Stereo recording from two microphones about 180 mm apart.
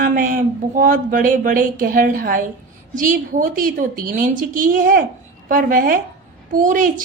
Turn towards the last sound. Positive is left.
turn(degrees=-45)  # may be behind; listen again after turning